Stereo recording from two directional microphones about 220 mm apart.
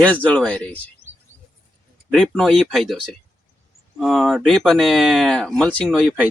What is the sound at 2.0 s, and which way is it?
Speech, centre (ahead or behind).